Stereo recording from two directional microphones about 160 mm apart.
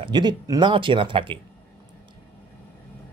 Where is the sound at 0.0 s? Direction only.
25° right (ahead or behind).